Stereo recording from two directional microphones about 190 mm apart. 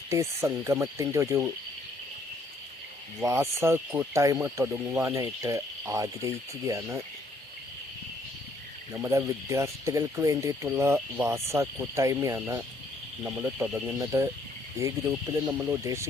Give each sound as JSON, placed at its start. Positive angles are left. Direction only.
{"t": 0.1, "sound": "speech", "side_deg": -15}
{"t": 3.2, "sound": "speech", "side_deg": -15}
{"t": 8.9, "sound": "speech", "side_deg": -15}